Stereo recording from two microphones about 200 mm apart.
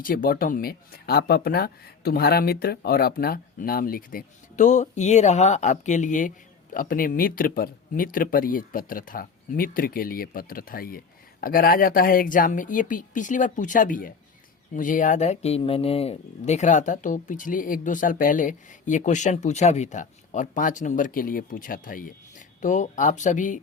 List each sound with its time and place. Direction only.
0.0 s speech: 45° left (ahead or behind)